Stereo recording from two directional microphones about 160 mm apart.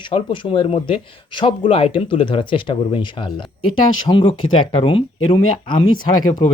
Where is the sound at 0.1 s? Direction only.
35° left (ahead or behind).